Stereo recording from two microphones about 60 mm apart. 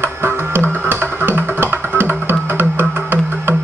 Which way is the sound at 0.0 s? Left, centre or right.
Right.